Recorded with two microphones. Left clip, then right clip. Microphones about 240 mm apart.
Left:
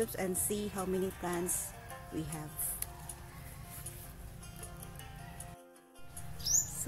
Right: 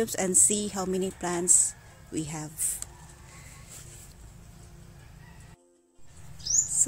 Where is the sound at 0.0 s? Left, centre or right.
Right.